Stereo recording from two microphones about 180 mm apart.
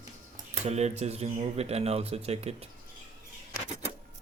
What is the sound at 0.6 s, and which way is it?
Speech, 40° right (ahead or behind).